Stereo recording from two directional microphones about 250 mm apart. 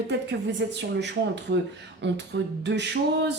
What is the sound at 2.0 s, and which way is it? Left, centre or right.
Speech, right.